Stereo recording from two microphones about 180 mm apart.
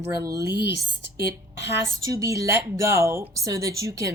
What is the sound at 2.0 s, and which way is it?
Speech, 20° right (ahead or behind).